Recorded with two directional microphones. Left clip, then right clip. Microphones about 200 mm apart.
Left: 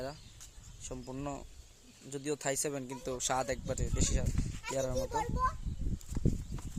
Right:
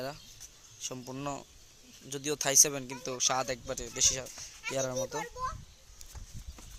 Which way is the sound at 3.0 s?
15° left (ahead or behind).